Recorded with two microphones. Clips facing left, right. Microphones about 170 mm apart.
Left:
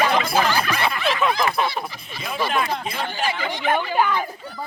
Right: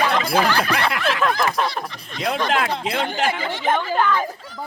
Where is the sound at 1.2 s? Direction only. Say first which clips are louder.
Even; centre (ahead or behind).